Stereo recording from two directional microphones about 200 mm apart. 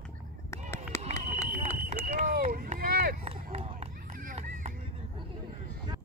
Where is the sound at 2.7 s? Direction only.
45° right (ahead or behind).